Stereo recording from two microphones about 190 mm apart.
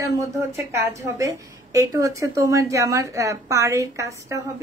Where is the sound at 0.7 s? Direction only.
15° right (ahead or behind).